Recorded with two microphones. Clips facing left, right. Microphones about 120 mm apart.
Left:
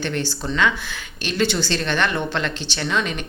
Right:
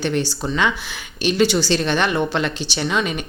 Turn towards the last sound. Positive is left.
turn(degrees=-10)  # may be behind; listen again after turning